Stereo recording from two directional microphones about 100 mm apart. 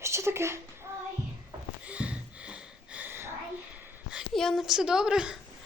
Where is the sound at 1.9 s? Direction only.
10° right (ahead or behind).